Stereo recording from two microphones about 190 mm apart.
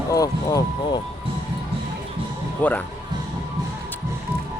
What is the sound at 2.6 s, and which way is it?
Speech, 10° left (ahead or behind).